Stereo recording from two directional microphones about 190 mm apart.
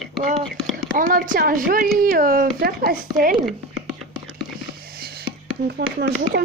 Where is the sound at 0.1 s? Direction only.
Centre (ahead or behind).